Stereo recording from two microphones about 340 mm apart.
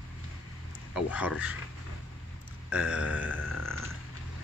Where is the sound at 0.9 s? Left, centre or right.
Centre.